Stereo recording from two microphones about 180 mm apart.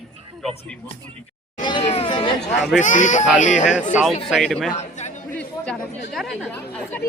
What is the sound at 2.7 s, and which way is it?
Speech, 45° left (ahead or behind).